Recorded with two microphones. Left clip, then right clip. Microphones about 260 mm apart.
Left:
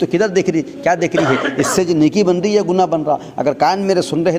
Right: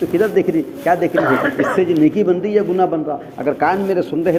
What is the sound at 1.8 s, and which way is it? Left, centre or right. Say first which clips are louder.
Speech: left 1 dB; left.